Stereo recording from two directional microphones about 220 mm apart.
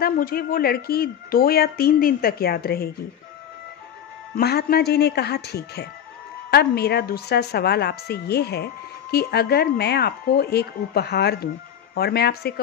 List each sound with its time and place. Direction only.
0.0 s a woman's voice: 40° left (ahead or behind)
4.4 s a woman's voice: 45° left (ahead or behind)